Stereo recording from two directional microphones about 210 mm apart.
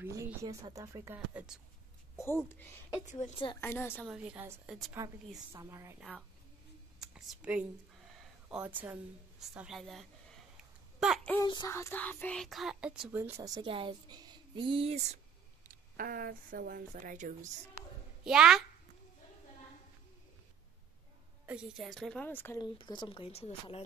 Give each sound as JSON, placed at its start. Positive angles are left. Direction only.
{"t": 0.0, "sound": "a woman's voice", "side_deg": -15}
{"t": 2.1, "sound": "speech", "side_deg": 10}
{"t": 3.1, "sound": "a woman's voice", "side_deg": 35}
{"t": 3.6, "sound": "speech", "side_deg": 10}
{"t": 3.9, "sound": "speech", "side_deg": -5}
{"t": 5.5, "sound": "a woman's voice", "side_deg": -15}
{"t": 7.0, "sound": "a woman's voice", "side_deg": 0}
{"t": 11.0, "sound": "a sound", "side_deg": 0}
{"t": 11.4, "sound": "speech", "side_deg": 15}
{"t": 13.6, "sound": "speech", "side_deg": -25}
{"t": 15.7, "sound": "speech", "side_deg": -45}
{"t": 18.2, "sound": "speech", "side_deg": -5}
{"t": 21.5, "sound": "speech", "side_deg": -5}
{"t": 22.8, "sound": "speech", "side_deg": 20}